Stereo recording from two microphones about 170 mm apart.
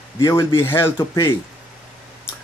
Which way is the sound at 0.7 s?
15° left (ahead or behind).